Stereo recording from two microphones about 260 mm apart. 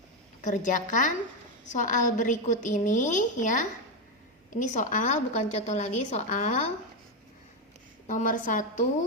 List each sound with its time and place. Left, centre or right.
0.4 s a woman's voice: left
8.0 s a woman's voice: left